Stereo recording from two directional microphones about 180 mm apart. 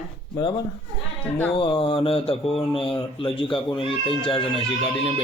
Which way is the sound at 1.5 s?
30° left (ahead or behind).